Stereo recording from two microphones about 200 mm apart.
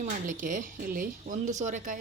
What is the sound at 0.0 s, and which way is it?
Speech, 40° right (ahead or behind).